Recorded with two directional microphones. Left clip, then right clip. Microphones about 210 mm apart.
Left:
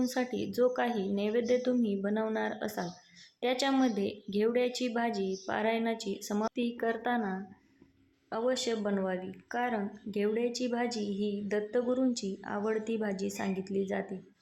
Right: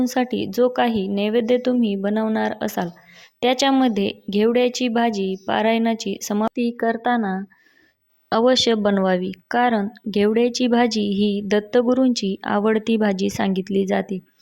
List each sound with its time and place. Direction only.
0.0 s speech: 35° right (ahead or behind)